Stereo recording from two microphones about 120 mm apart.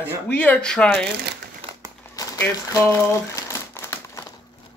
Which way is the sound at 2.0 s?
20° left (ahead or behind).